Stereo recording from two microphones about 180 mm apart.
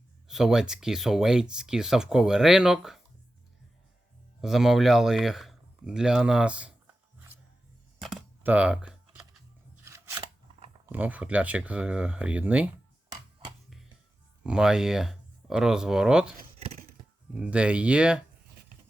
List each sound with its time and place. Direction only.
0.3 s speech: 5° right (ahead or behind)
4.4 s speech: centre (ahead or behind)
8.0 s computer keyboard: 5° right (ahead or behind)
9.8 s scissors: 15° right (ahead or behind)
10.8 s speech: 10° right (ahead or behind)
14.4 s speech: 5° right (ahead or behind)
16.6 s a sound: 35° right (ahead or behind)
17.3 s speech: 5° right (ahead or behind)